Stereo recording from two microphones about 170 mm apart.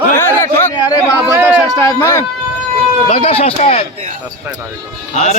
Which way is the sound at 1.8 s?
20° left (ahead or behind).